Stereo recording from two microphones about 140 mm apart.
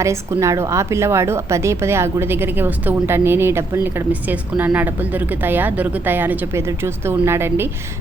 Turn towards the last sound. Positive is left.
turn(degrees=-15)  # may be behind; listen again after turning